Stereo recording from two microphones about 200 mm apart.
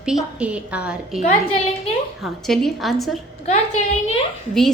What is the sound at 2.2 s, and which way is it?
A woman's voice, centre (ahead or behind).